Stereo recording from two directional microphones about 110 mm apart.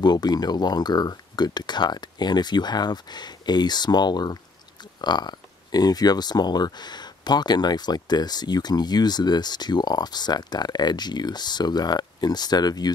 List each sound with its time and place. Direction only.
0.0 s speech: 40° left (ahead or behind)